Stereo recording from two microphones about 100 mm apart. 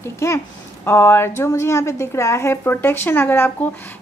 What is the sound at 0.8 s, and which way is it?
A woman's voice, 25° left (ahead or behind).